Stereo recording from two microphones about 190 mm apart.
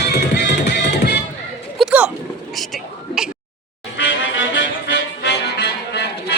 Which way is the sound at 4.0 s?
75° left (ahead or behind).